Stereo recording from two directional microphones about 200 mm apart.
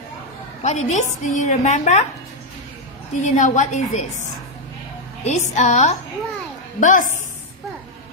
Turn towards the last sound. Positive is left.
turn(degrees=40)  # may be behind; listen again after turning